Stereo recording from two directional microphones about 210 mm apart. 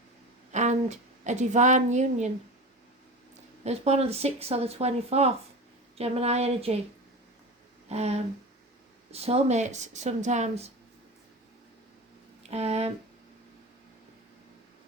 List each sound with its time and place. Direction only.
0.5 s a woman's voice: 35° right (ahead or behind)
3.6 s speech: 30° right (ahead or behind)
7.9 s speech: 30° right (ahead or behind)
12.4 s speech: 30° right (ahead or behind)